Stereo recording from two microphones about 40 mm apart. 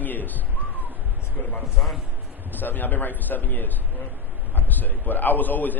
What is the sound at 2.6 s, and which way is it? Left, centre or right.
A man's voice, left.